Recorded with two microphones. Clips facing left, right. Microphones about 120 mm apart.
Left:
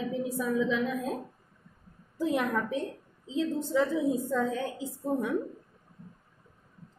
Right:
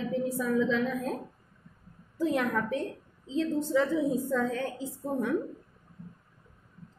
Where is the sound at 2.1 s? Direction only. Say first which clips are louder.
Even; 15° left (ahead or behind).